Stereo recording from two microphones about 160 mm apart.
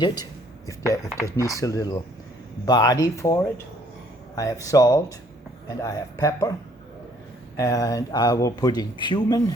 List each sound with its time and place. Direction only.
0.0 s speech: 25° left (ahead or behind)
7.5 s speech: 20° left (ahead or behind)